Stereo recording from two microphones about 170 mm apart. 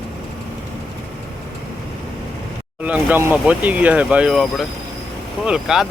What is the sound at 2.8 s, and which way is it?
Speech, 10° right (ahead or behind).